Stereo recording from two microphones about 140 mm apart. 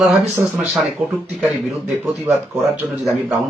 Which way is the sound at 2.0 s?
15° right (ahead or behind).